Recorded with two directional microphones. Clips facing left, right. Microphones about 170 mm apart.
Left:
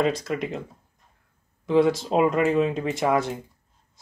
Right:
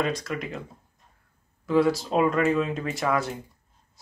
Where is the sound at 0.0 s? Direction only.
25° left (ahead or behind).